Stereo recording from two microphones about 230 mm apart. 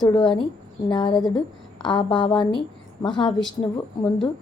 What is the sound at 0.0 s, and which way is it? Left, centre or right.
A woman's voice, centre.